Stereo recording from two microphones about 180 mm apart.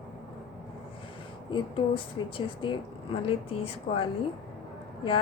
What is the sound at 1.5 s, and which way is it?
Speech, 25° left (ahead or behind).